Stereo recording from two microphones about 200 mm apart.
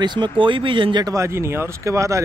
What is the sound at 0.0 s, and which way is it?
Speech, 20° right (ahead or behind).